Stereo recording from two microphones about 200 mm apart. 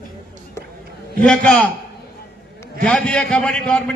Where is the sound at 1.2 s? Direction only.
5° left (ahead or behind).